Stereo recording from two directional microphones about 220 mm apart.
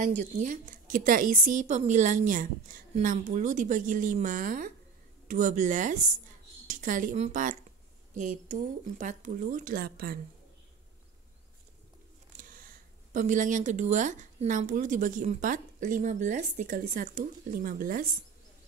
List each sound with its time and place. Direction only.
0.4 s speech: 35° right (ahead or behind)
12.4 s speech: 40° right (ahead or behind)